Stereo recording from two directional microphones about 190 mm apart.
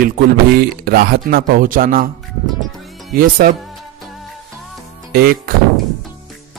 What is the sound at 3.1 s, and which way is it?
Speech, 50° right (ahead or behind).